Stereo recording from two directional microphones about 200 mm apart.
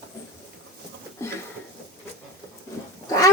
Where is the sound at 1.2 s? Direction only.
15° left (ahead or behind).